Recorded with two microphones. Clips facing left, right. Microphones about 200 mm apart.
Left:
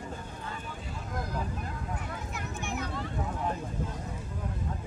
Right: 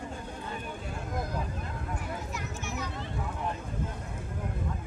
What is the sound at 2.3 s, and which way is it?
Children playing, 55° left (ahead or behind).